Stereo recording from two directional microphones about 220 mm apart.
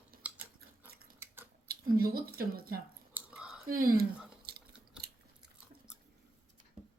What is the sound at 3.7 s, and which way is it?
Speech, 40° right (ahead or behind).